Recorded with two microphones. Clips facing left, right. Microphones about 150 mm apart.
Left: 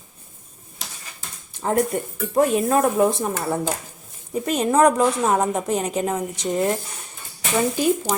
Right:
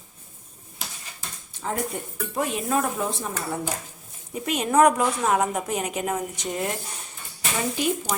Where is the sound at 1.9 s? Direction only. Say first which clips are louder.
Left 9 dB; 55° left (ahead or behind).